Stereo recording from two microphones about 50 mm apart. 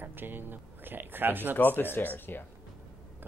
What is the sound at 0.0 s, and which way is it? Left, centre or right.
Speech, right.